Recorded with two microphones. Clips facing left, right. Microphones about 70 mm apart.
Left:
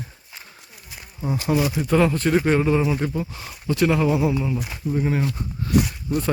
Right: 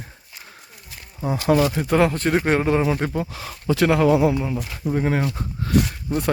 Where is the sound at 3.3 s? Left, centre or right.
Right.